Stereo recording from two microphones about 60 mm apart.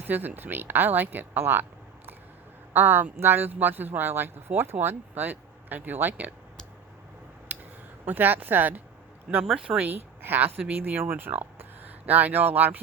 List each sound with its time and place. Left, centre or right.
0.0 s speech: right
2.7 s speech: right
7.5 s a sound: right
8.0 s speech: right
9.6 s speech: centre
9.9 s speech: right